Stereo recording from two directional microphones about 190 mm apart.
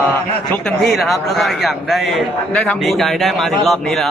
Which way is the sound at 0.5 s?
Centre (ahead or behind).